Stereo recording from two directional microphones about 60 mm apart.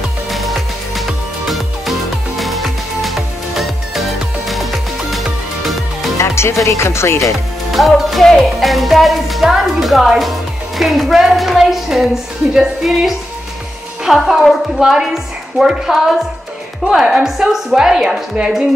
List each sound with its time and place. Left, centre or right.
0.3 s music: centre
6.1 s music: left
6.6 s speech: left
7.3 s music: centre
15.6 s a woman's voice: centre